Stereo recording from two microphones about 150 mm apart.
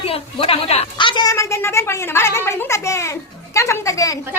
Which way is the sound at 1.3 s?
20° left (ahead or behind).